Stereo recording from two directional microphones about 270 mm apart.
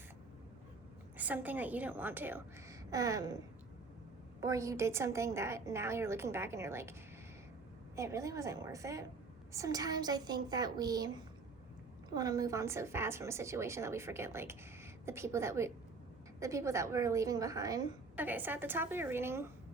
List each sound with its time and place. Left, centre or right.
1.1 s a woman's voice: centre
4.4 s a woman's voice: centre
7.9 s a woman's voice: centre